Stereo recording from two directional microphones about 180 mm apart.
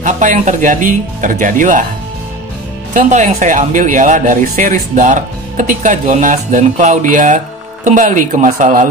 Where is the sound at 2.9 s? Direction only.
40° right (ahead or behind).